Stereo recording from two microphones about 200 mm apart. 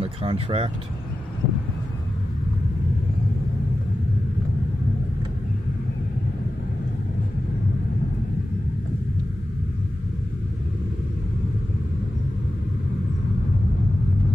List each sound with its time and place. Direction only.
0.0 s speech: 30° right (ahead or behind)